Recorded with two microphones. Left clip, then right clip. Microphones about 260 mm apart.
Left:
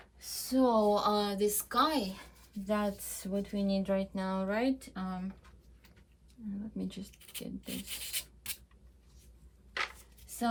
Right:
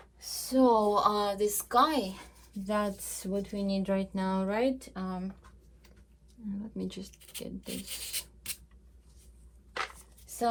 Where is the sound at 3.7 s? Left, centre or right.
Right.